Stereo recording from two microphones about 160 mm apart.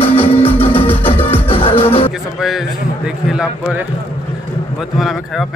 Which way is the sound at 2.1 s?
Centre (ahead or behind).